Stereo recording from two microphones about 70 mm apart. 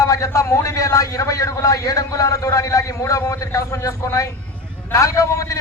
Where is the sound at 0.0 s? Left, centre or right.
Left.